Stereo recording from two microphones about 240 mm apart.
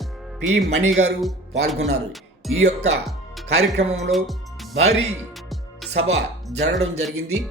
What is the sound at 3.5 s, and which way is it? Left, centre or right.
Speech, right.